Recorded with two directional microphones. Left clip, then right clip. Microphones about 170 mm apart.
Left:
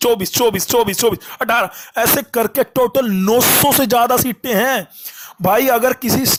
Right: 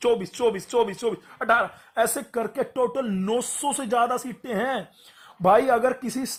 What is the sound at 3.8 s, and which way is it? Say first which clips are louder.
A man's voice: left 10 dB; 30° left (ahead or behind).